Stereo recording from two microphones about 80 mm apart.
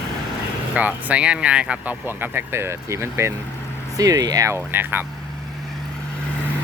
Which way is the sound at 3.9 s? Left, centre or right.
Right.